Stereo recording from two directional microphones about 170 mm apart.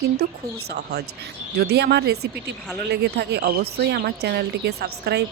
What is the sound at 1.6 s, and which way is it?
Speech, 70° right (ahead or behind).